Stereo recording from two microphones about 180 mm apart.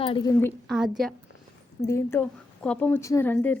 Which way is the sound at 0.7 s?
Centre (ahead or behind).